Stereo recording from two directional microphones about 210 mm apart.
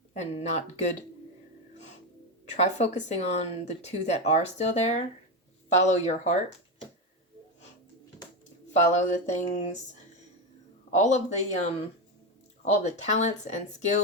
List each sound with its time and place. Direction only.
0.1 s speech: 30° left (ahead or behind)
2.6 s speech: 30° left (ahead or behind)
8.9 s speech: 35° left (ahead or behind)
10.9 s speech: 35° left (ahead or behind)